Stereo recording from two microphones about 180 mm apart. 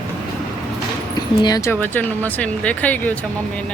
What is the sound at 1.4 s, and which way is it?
Speech, 20° left (ahead or behind).